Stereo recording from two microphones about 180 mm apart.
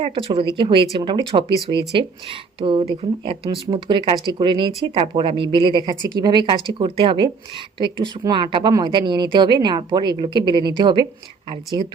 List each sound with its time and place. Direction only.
0.0 s speech: 30° right (ahead or behind)